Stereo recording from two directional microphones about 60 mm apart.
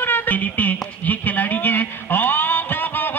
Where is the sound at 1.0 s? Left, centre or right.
Left.